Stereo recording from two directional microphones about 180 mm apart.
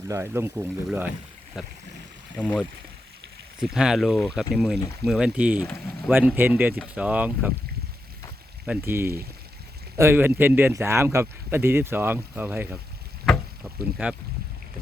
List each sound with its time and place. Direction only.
0.1 s speech: 15° right (ahead or behind)
8.6 s speech: 10° right (ahead or behind)
14.0 s speech: 10° right (ahead or behind)